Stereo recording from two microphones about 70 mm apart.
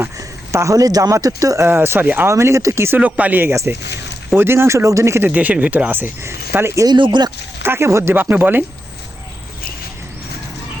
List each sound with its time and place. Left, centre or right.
0.2 s a sound: right
1.1 s speech: right
1.6 s speech: right
3.0 s speech: right
4.4 s speech: right
5.3 s speech: right
6.8 s speech: right
7.6 s speech: right
8.1 s speech: right